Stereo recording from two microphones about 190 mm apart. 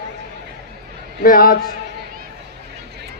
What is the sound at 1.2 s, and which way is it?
Speech, 50° left (ahead or behind).